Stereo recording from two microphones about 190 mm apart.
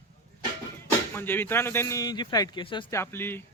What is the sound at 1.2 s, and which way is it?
Speech, 10° left (ahead or behind).